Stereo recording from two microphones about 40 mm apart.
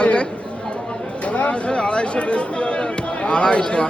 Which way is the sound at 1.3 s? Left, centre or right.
Left.